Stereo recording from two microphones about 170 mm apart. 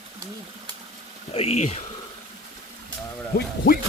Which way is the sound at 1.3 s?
35° left (ahead or behind).